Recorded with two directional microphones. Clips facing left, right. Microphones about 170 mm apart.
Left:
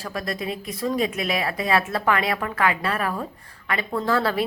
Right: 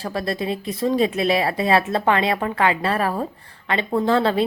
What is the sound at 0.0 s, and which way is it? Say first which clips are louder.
Speech: right 4 dB; 30° right (ahead or behind).